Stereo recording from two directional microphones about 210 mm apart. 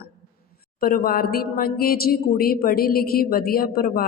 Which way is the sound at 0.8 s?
45° left (ahead or behind).